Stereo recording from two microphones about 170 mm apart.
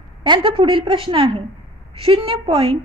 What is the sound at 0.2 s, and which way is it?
A woman's voice, 30° right (ahead or behind).